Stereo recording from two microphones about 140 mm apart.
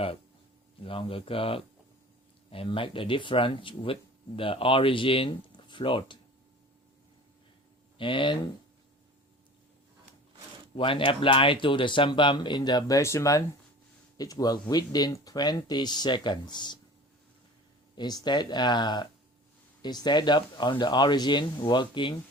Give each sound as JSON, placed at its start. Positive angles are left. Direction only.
{"t": 0.8, "sound": "speech", "side_deg": 40}
{"t": 7.9, "sound": "speech", "side_deg": 35}
{"t": 10.8, "sound": "speech", "side_deg": 35}
{"t": 17.9, "sound": "speech", "side_deg": 30}